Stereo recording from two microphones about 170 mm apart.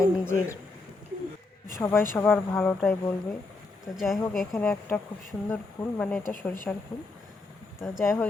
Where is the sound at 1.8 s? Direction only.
15° left (ahead or behind).